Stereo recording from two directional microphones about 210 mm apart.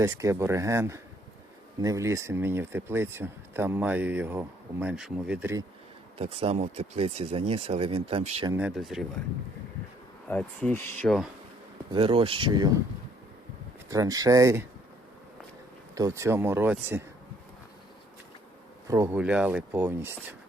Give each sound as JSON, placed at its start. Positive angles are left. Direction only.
{"t": 0.0, "sound": "speech", "side_deg": -15}
{"t": 6.1, "sound": "speech", "side_deg": -30}
{"t": 8.5, "sound": "speech", "side_deg": -5}
{"t": 10.2, "sound": "speech", "side_deg": 5}
{"t": 11.9, "sound": "speech", "side_deg": -25}
{"t": 13.9, "sound": "speech", "side_deg": -15}
{"t": 16.0, "sound": "speech", "side_deg": -15}
{"t": 18.9, "sound": "speech", "side_deg": -10}